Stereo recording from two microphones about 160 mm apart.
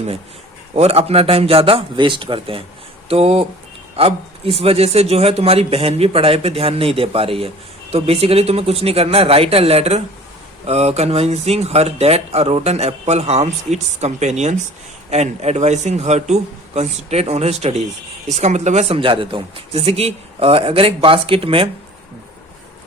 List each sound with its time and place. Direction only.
0.8 s speech: 40° right (ahead or behind)